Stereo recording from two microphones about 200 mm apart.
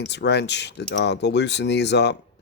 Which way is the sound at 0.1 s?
60° left (ahead or behind).